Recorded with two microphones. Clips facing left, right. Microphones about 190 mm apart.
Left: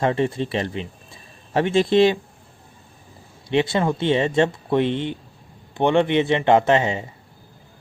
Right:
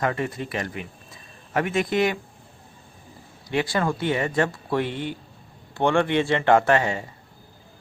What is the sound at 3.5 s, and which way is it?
Speech, 20° left (ahead or behind).